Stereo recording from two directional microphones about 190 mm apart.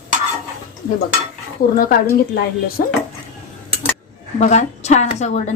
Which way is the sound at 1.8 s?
50° left (ahead or behind).